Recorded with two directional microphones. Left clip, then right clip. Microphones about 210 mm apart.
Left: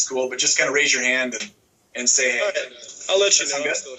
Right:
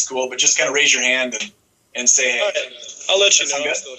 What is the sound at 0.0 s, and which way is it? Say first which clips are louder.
Speech: right 3 dB; 15° left (ahead or behind).